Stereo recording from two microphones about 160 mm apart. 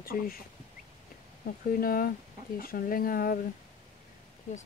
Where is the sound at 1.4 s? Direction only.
60° left (ahead or behind).